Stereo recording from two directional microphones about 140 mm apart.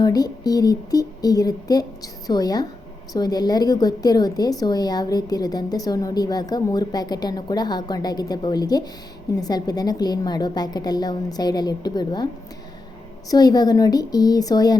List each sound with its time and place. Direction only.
0.0 s a woman's voice: 25° left (ahead or behind)
13.3 s a woman's voice: 30° left (ahead or behind)